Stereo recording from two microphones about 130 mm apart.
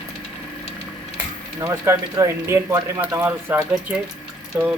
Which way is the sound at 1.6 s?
20° right (ahead or behind).